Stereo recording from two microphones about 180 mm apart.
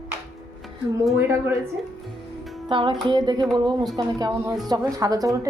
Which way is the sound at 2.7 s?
25° right (ahead or behind).